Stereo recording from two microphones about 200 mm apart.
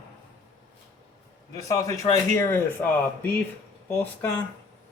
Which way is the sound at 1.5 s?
15° left (ahead or behind).